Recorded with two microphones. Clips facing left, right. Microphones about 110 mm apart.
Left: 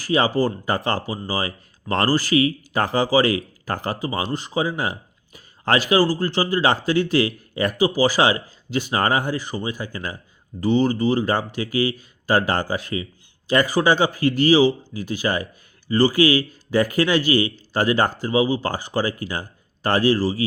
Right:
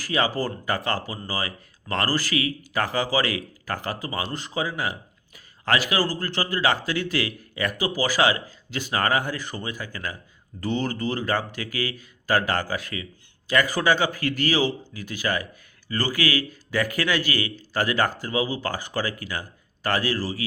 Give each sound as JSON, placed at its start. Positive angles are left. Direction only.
{"t": 0.0, "sound": "speech", "side_deg": 20}